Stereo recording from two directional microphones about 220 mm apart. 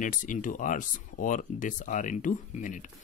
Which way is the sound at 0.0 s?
35° left (ahead or behind).